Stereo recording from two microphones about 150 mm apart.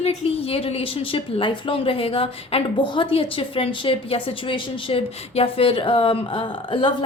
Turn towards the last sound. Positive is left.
turn(degrees=35)  # may be behind; listen again after turning